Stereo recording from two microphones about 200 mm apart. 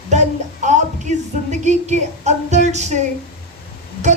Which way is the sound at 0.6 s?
35° right (ahead or behind).